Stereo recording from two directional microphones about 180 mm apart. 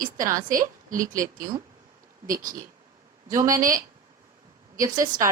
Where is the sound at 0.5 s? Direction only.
50° right (ahead or behind).